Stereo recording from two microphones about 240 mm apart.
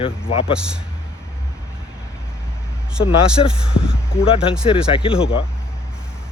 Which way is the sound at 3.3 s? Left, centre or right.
Centre.